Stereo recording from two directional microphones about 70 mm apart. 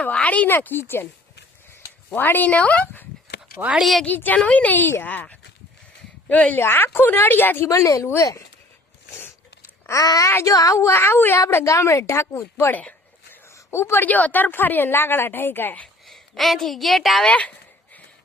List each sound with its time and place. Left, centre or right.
0.0 s a woman's voice: centre
0.5 s speech: left
2.0 s a woman's voice: left
3.6 s speech: centre
4.0 s a woman's voice: left
6.6 s speech: left
7.7 s speech: left
9.9 s a child's voice: left
10.8 s speech: left
11.4 s speech: left
13.3 s a sound: left
14.0 s a woman's voice: left
16.0 s a woman's voice: centre
17.2 s speech: centre